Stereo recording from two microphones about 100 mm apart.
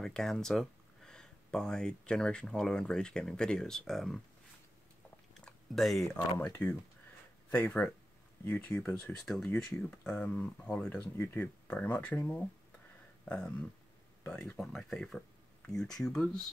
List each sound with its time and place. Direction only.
0.0 s speech: 5° left (ahead or behind)
5.4 s a sound: centre (ahead or behind)
6.1 s speech: 20° left (ahead or behind)
11.0 s speech: 20° left (ahead or behind); by 16.3 s 5° left (ahead or behind)